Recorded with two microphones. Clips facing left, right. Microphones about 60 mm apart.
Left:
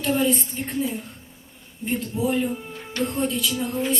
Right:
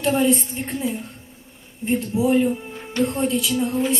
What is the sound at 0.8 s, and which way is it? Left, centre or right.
Music, centre.